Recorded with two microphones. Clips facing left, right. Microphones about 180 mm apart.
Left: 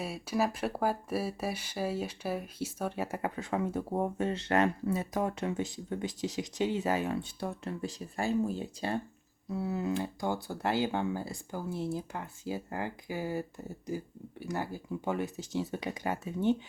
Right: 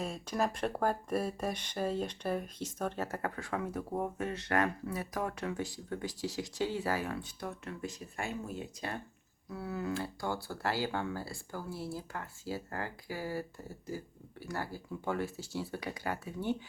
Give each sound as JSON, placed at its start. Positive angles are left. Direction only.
{"t": 0.0, "sound": "speech", "side_deg": 5}